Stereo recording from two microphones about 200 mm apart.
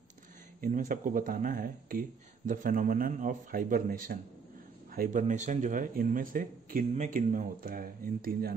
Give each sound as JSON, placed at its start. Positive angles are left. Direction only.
{"t": 0.6, "sound": "speech", "side_deg": -40}